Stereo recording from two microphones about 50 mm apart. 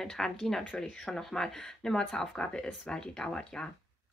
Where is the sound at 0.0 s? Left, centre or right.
Centre.